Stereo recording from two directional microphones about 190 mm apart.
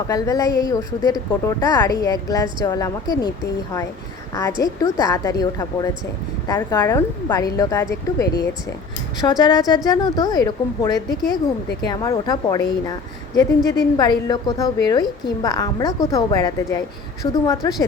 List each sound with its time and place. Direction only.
0.1 s a woman's voice: 20° left (ahead or behind)